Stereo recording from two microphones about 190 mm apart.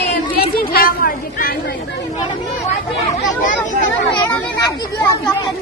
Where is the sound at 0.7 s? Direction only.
50° left (ahead or behind).